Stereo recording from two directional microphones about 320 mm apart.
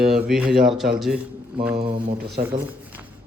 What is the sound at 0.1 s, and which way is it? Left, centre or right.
Speech, centre.